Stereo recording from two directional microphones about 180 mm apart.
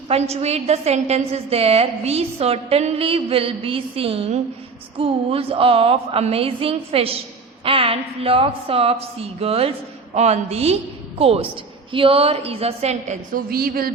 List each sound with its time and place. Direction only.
0.1 s a woman's voice: 35° right (ahead or behind)
13.5 s speech: 55° right (ahead or behind)